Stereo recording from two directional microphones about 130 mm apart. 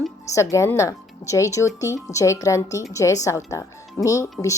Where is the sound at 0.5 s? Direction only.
25° left (ahead or behind).